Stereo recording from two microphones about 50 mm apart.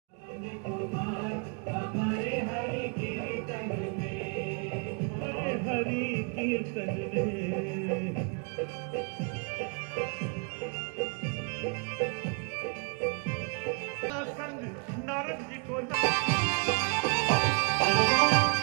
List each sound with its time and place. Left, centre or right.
0.7 s music: centre
16.0 s music: right